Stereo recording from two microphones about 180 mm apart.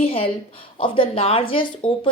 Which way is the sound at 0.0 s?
30° left (ahead or behind).